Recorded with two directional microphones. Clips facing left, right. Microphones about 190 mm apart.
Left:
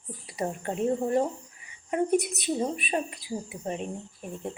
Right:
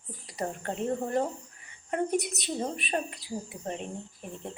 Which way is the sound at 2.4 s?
10° left (ahead or behind).